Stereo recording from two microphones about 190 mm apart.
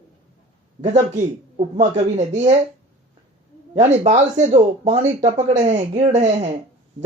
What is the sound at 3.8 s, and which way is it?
Speech, 35° right (ahead or behind).